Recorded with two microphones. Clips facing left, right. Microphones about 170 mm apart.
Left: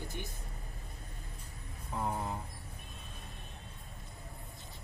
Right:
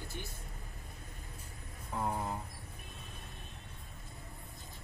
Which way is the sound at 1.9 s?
Centre (ahead or behind).